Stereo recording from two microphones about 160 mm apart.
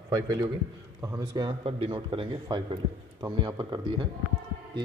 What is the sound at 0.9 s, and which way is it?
Speech, 20° right (ahead or behind).